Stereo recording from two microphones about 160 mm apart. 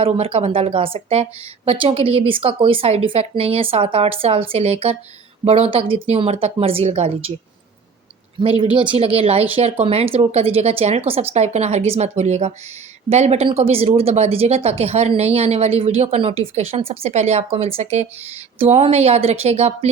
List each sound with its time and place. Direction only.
0.0 s speech: 35° right (ahead or behind)
8.4 s speech: 35° right (ahead or behind)